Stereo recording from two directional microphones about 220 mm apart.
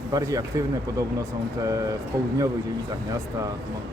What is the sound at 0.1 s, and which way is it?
Speech, 15° right (ahead or behind).